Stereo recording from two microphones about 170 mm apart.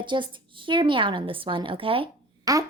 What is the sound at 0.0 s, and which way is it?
Speech, 30° right (ahead or behind).